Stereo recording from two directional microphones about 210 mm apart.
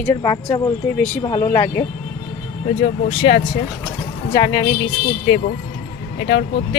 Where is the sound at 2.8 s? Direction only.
25° left (ahead or behind).